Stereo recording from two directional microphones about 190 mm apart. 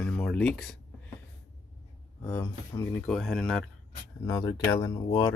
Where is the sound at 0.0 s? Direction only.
5° left (ahead or behind).